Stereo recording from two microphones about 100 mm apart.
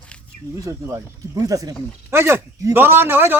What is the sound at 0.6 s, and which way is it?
Speech, 30° right (ahead or behind).